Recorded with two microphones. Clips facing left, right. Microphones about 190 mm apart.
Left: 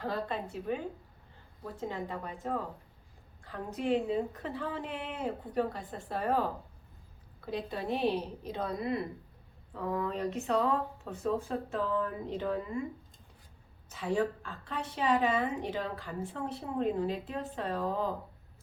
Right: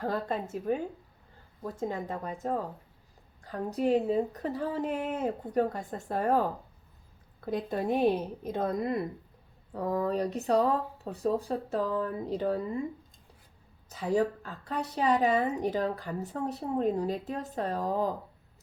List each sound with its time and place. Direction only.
0.0 s a woman's voice: 45° right (ahead or behind)
7.4 s a woman's voice: 45° right (ahead or behind)
14.0 s a woman's voice: 40° right (ahead or behind)